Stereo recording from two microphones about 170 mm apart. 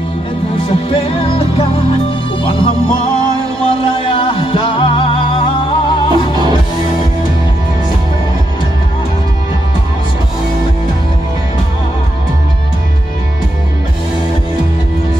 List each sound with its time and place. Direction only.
0.6 s music: 30° left (ahead or behind)